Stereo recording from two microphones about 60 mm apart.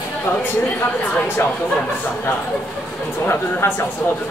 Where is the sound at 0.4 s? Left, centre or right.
Left.